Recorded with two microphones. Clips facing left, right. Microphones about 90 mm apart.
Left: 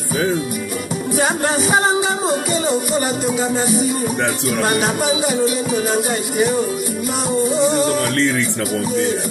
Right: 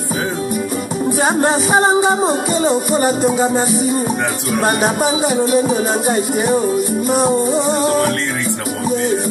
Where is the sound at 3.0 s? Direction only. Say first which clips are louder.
Right 5 dB; 40° right (ahead or behind).